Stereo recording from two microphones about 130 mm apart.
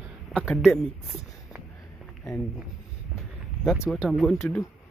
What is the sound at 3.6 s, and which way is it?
Speech, centre (ahead or behind).